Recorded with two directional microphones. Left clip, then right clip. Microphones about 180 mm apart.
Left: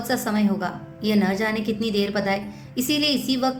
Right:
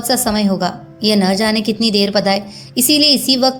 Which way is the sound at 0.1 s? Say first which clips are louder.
Right 8 dB; 35° right (ahead or behind).